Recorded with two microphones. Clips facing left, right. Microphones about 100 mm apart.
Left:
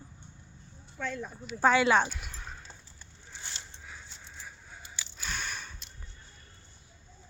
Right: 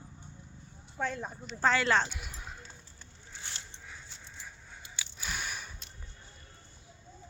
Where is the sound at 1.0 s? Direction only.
30° right (ahead or behind).